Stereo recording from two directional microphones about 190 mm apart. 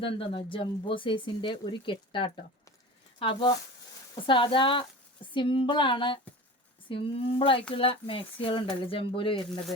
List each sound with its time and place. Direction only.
0.0 s speech: 30° left (ahead or behind)